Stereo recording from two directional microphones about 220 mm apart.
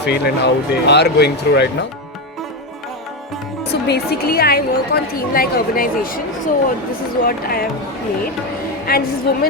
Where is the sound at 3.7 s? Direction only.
50° left (ahead or behind).